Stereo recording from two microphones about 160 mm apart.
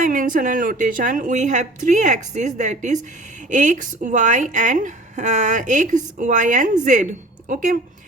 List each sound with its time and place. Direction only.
0.0 s a woman's voice: 55° right (ahead or behind)